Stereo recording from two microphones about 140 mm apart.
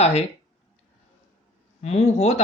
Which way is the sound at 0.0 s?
50° left (ahead or behind).